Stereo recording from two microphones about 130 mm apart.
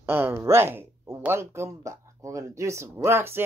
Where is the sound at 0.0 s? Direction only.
15° right (ahead or behind).